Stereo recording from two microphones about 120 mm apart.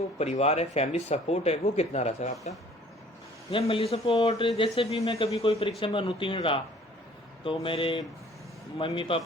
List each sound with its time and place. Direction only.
0.2 s speech: 60° left (ahead or behind)
3.5 s speech: 50° left (ahead or behind)